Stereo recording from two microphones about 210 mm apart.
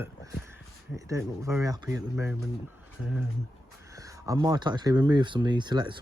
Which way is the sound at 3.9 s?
15° right (ahead or behind).